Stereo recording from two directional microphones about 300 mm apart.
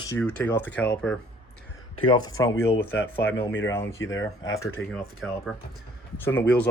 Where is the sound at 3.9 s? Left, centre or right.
Left.